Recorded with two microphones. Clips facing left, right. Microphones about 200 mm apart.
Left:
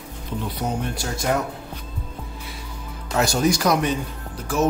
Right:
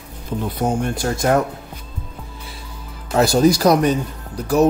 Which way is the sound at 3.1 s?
35° right (ahead or behind).